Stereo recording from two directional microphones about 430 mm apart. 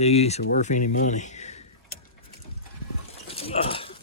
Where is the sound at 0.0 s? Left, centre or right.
Centre.